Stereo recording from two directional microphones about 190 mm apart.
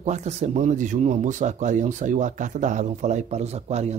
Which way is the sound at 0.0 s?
35° right (ahead or behind).